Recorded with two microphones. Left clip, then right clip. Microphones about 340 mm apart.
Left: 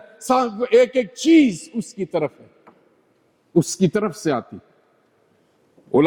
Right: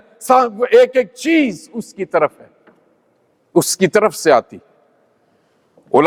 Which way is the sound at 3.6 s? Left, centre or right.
Right.